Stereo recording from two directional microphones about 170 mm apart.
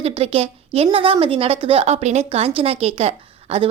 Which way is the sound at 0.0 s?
35° right (ahead or behind).